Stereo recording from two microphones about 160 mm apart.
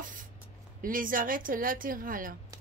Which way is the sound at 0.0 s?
55° right (ahead or behind).